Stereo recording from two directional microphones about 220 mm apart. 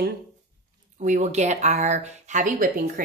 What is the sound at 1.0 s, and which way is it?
Speech, 35° right (ahead or behind).